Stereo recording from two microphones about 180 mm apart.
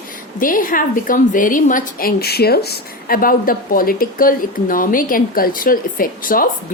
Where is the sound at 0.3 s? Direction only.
50° left (ahead or behind).